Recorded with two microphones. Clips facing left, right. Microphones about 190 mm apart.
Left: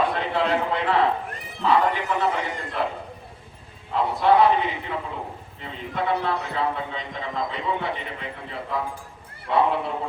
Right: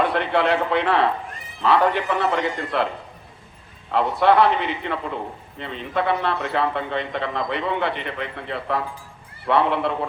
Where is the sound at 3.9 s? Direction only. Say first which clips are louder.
Right 2 dB; 70° right (ahead or behind).